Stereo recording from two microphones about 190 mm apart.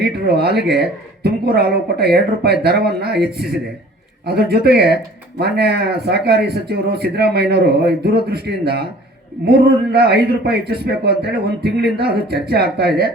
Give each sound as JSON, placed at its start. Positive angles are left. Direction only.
{"t": 0.0, "sound": "speech", "side_deg": -55}